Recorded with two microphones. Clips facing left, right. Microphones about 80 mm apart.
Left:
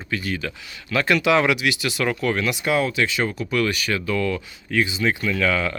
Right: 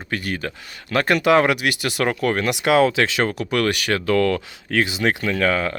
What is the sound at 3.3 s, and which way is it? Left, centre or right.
Speech, right.